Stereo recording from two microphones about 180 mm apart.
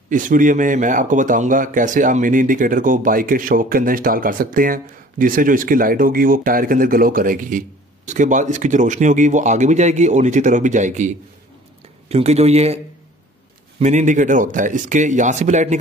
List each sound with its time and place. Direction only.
0.1 s speech: 45° right (ahead or behind)